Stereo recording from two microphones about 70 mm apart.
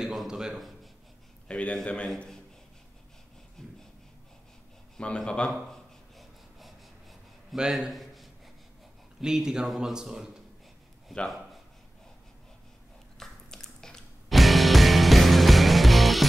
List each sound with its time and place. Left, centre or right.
0.0 s a man's voice: centre
1.5 s a man's voice: centre
3.6 s a sound: centre
4.9 s a man's voice: centre
5.7 s a sound: centre
9.2 s a man's voice: centre
13.2 s music: centre